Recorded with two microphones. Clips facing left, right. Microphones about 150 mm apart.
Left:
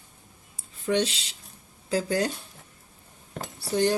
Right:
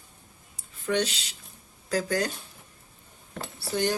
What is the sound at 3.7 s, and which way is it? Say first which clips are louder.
Speech: left 3 dB; 30° left (ahead or behind).